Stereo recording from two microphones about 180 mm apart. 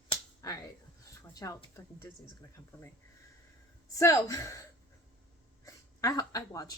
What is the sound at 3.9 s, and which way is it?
Speech, 20° left (ahead or behind).